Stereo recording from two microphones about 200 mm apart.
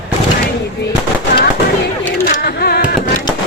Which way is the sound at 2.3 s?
50° left (ahead or behind).